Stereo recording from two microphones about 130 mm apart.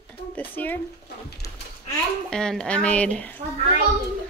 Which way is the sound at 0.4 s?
15° left (ahead or behind).